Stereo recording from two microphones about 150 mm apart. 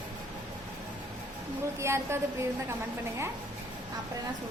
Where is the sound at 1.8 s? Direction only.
15° right (ahead or behind).